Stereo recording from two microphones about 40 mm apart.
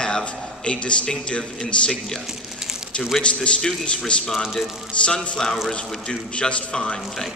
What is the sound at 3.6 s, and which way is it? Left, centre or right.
Speech, centre.